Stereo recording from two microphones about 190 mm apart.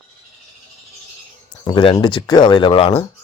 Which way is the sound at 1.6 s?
25° left (ahead or behind).